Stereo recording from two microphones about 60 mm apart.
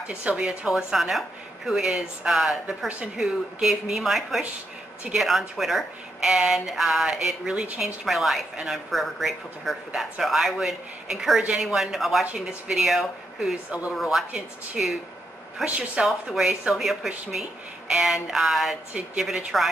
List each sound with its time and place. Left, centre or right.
0.1 s a woman's voice: right
0.4 s speech: centre
14.8 s speech: centre
15.6 s a woman's voice: centre
16.1 s speech: centre